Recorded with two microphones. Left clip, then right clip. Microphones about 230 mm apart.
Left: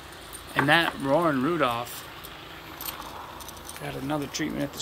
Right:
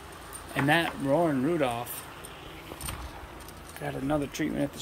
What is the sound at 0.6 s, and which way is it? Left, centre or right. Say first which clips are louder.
Speech: left 4 dB; centre.